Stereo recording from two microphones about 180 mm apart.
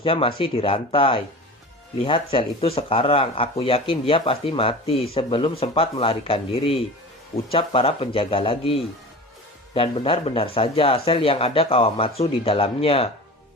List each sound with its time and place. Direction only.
0.0 s speech: 30° left (ahead or behind)